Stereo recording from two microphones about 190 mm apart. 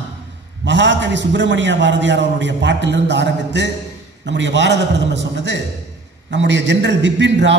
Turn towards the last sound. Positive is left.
turn(degrees=-70)  # may be behind; listen again after turning